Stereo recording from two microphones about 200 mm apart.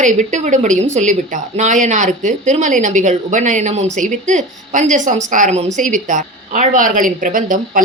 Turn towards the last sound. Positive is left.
turn(degrees=-40)  # may be behind; listen again after turning